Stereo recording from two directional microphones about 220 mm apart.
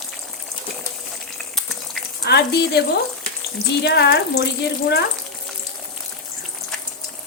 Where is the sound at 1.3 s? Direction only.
Centre (ahead or behind).